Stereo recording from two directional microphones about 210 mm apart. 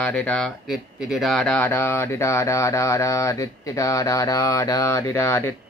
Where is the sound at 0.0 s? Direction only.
5° left (ahead or behind).